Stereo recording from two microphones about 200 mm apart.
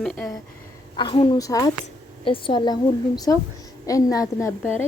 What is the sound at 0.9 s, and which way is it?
A woman's voice, 25° left (ahead or behind).